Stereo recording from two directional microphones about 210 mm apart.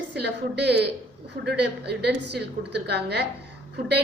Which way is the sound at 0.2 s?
50° right (ahead or behind).